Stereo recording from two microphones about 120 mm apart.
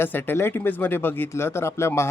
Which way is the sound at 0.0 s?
15° left (ahead or behind).